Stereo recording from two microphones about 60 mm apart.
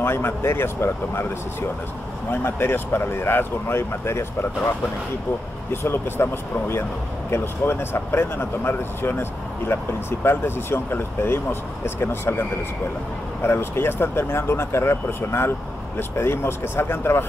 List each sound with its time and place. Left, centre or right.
0.0 s speech: left
2.3 s speech: left
5.7 s speech: left